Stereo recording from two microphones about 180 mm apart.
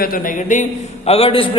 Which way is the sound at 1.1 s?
35° left (ahead or behind).